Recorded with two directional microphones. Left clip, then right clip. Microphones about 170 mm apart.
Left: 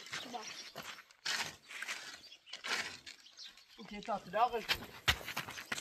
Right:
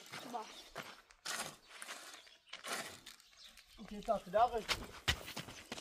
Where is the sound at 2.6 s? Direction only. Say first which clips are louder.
Left 6 dB; 90° right.